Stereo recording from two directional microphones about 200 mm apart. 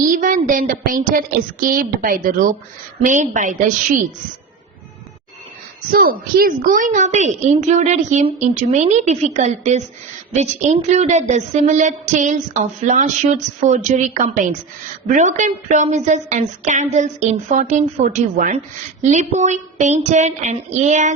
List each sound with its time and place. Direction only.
0.0 s a woman's voice: 40° right (ahead or behind)
5.9 s speech: 45° right (ahead or behind)